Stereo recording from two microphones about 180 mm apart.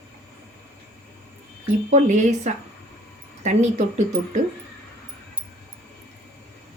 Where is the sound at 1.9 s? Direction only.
40° right (ahead or behind).